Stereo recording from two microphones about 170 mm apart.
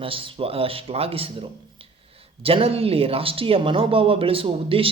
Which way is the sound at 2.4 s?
35° right (ahead or behind).